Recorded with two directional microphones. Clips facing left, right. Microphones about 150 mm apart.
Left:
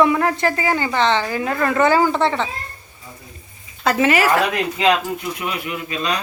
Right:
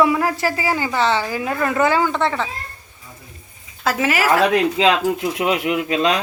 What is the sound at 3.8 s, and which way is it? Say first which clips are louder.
Speech: left 3 dB; 5° right (ahead or behind).